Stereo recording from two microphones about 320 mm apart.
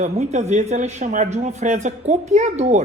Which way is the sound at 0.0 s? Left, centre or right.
Right.